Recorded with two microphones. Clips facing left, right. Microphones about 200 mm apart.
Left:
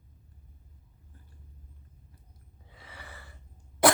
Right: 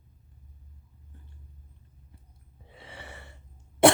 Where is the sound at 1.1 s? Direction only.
25° right (ahead or behind).